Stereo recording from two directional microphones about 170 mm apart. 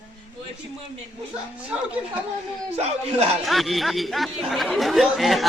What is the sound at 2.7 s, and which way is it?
Speech, 40° right (ahead or behind).